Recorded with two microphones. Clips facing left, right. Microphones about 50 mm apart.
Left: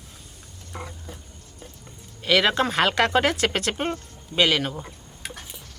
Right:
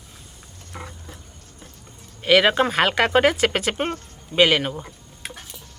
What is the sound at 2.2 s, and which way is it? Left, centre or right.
Speech, centre.